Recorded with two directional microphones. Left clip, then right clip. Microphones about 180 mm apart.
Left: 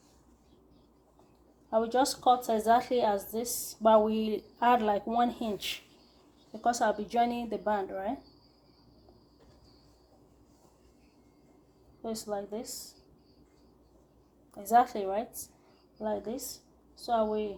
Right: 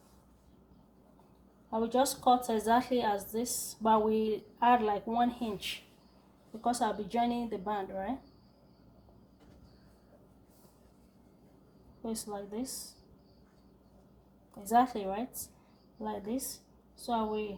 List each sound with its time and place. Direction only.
1.7 s a woman's voice: 50° left (ahead or behind)
12.0 s a woman's voice: 45° left (ahead or behind)
14.6 s a woman's voice: 50° left (ahead or behind)